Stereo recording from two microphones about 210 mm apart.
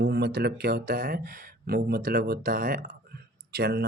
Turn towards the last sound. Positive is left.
turn(degrees=-50)  # may be behind; listen again after turning